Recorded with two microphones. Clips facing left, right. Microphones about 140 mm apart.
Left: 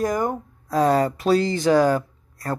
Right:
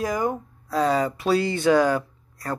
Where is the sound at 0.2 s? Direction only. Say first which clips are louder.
Left 1 dB; 50° left (ahead or behind).